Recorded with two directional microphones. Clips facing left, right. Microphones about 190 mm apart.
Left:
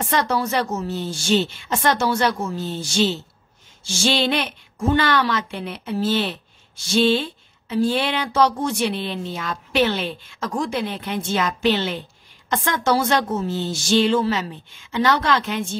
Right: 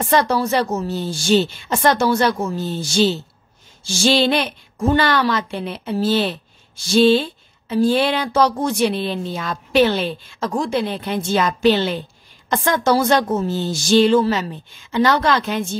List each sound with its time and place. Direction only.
0.1 s speech: 35° right (ahead or behind)
4.0 s speech: 35° right (ahead or behind)